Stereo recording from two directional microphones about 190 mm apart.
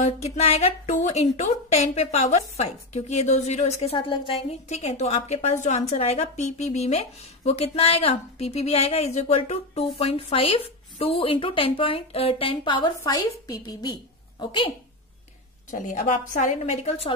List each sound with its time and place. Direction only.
0.0 s a woman's voice: 35° left (ahead or behind)
15.7 s a woman's voice: 40° left (ahead or behind)